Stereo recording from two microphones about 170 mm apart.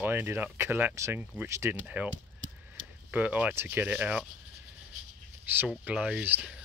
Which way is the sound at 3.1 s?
10° right (ahead or behind).